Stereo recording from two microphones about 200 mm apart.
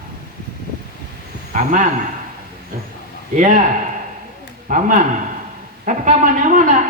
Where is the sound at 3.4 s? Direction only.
40° right (ahead or behind).